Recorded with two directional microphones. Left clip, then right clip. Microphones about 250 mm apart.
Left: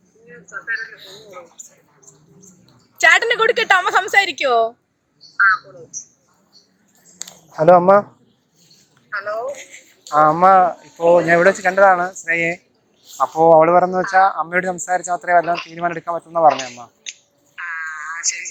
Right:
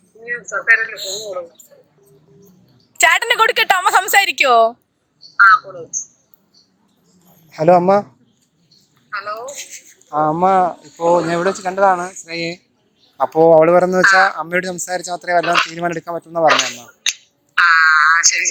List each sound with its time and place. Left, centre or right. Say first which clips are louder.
0.5 s a woman's voice: right 11 dB; right
3.0 s a woman's voice: right 1 dB; right
7.5 s speech: left 1 dB; centre
9.0 s a woman's voice: left 2 dB; centre
10.4 s speech: left 2 dB; centre
13.1 s speech: right 1 dB; right
17.5 s frog: right 17 dB; right